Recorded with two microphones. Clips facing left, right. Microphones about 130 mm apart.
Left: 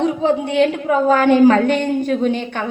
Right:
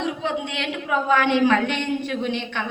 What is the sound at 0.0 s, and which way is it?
A woman's voice, 40° left (ahead or behind).